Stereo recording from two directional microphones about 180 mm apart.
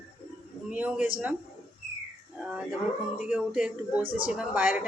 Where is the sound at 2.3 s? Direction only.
5° right (ahead or behind).